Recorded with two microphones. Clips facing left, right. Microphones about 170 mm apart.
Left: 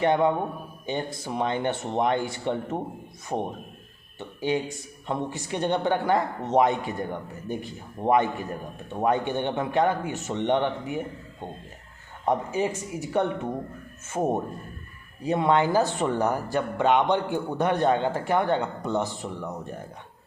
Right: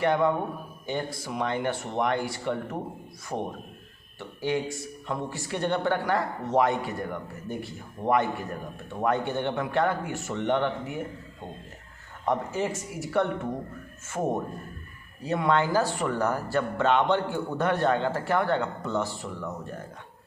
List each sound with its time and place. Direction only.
0.0 s speech: 20° left (ahead or behind)
12.2 s speech: 15° left (ahead or behind)